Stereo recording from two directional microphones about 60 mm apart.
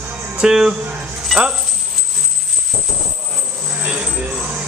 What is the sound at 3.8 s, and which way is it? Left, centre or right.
Music, centre.